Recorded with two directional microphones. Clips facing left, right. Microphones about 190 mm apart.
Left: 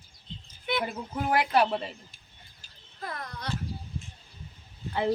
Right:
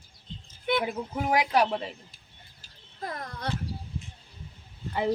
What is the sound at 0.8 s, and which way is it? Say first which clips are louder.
Speech: right 2 dB; 5° right (ahead or behind).